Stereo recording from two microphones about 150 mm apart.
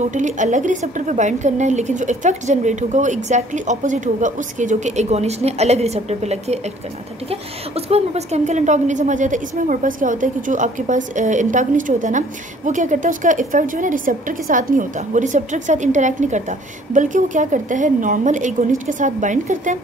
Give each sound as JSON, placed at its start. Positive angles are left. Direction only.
{"t": 0.1, "sound": "a woman's voice", "side_deg": -55}